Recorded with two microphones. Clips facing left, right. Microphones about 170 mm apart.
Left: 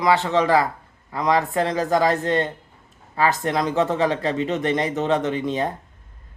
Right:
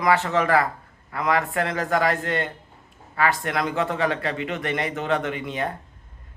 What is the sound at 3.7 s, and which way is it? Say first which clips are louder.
Speech: left 4 dB; 25° left (ahead or behind).